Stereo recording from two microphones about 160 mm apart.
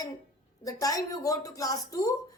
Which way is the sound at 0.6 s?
20° left (ahead or behind).